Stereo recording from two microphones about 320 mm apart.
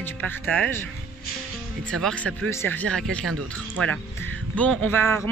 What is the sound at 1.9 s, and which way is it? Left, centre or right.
Speech, centre.